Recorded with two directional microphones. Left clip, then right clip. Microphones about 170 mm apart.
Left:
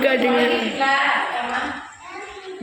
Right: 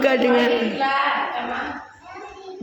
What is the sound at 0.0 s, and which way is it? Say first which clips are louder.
Speech: even; 25° right (ahead or behind).